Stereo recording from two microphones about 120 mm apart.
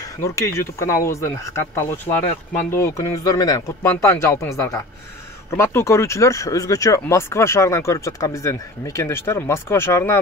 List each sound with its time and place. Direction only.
0.0 s speech: 25° left (ahead or behind)